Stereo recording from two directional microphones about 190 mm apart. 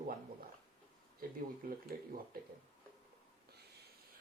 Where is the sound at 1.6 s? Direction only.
50° right (ahead or behind).